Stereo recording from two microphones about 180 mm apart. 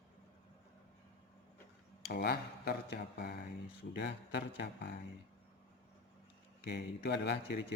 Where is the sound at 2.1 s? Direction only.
60° left (ahead or behind).